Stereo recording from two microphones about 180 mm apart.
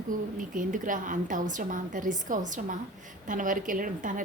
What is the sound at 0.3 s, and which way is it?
A woman's voice, 45° right (ahead or behind).